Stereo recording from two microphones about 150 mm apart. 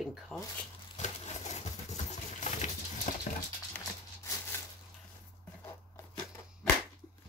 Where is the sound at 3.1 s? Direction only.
60° left (ahead or behind).